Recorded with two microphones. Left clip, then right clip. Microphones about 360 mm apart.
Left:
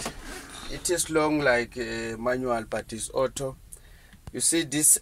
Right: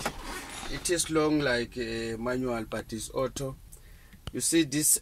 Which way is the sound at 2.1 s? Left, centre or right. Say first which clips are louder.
Left 7 dB; left.